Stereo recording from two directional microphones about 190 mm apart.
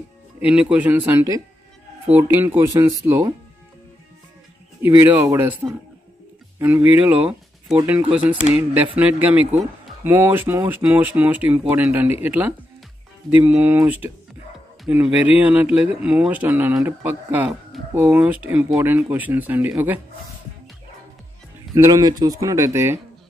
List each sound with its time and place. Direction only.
0.4 s speech: 5° right (ahead or behind)
4.8 s speech: 10° right (ahead or behind)
8.1 s a sound: 5° right (ahead or behind)
8.9 s speech: 10° right (ahead or behind)
21.7 s speech: 15° right (ahead or behind)